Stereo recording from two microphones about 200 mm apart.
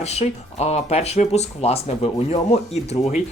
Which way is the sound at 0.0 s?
30° left (ahead or behind).